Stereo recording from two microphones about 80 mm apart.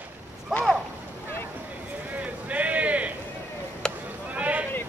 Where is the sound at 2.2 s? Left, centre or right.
Centre.